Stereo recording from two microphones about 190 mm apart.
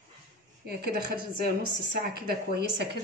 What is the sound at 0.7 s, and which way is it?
Speech, 55° right (ahead or behind).